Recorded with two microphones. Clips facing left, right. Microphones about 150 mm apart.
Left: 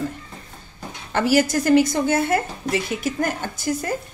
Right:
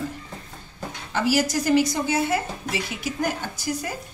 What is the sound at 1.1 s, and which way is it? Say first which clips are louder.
A woman's voice: left 4 dB; 55° left (ahead or behind).